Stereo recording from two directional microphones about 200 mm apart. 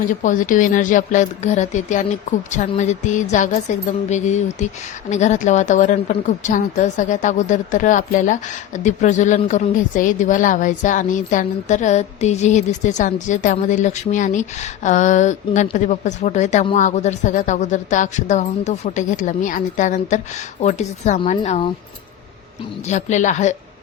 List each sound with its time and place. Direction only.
0.1 s a woman's voice: 40° left (ahead or behind)
22.9 s a woman's voice: 35° left (ahead or behind)